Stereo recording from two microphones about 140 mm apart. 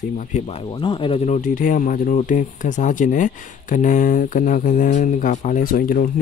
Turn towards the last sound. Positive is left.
turn(degrees=80)